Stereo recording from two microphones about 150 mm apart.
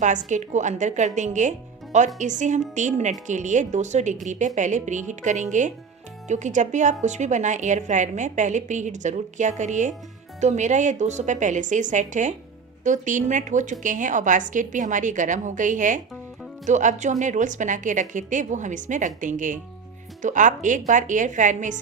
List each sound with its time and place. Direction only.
0.0 s a woman's voice: 55° right (ahead or behind)